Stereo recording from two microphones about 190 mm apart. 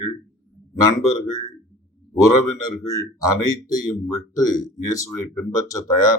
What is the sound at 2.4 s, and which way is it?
Speech, 20° left (ahead or behind).